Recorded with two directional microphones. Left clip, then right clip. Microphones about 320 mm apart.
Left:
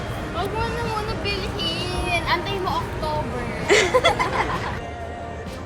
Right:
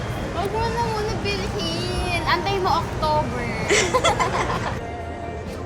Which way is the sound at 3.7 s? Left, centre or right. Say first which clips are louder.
Left 2 dB; centre.